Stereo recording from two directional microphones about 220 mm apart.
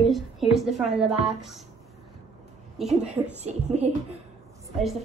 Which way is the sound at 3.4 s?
30° right (ahead or behind).